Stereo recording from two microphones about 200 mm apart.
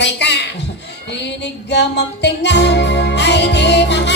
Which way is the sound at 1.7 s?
60° left (ahead or behind).